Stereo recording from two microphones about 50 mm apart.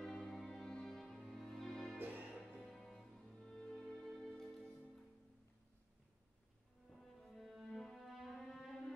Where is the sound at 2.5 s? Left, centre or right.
Centre.